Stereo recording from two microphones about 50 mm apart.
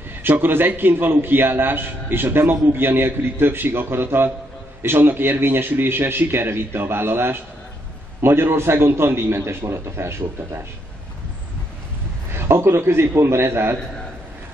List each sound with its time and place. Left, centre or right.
0.3 s a man's voice: right
12.3 s a man's voice: right